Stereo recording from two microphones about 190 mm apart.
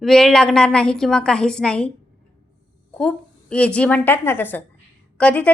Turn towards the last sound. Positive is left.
turn(degrees=5)  # may be behind; listen again after turning